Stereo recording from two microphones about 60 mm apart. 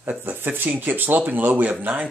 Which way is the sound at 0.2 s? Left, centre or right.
Right.